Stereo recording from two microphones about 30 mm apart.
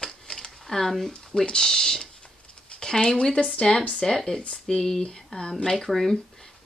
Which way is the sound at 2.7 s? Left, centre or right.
Left.